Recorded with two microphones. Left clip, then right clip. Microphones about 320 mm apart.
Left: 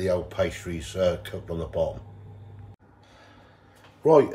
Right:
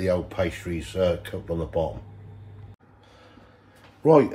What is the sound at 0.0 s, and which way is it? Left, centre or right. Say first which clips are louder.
Speech: even; centre.